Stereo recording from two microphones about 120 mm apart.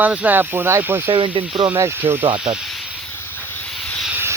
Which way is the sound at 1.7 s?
20° right (ahead or behind).